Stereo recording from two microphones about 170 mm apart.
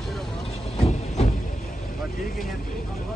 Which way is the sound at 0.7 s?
40° left (ahead or behind).